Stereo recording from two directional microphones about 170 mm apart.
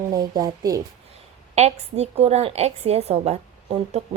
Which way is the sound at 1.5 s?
40° right (ahead or behind).